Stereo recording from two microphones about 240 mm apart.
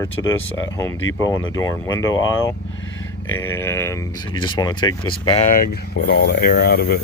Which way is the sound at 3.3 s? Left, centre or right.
Centre.